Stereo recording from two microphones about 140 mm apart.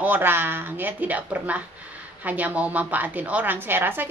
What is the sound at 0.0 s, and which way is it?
Speech, 15° right (ahead or behind).